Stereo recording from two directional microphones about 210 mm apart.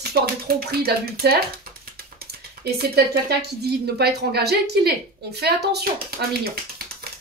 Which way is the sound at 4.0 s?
50° right (ahead or behind).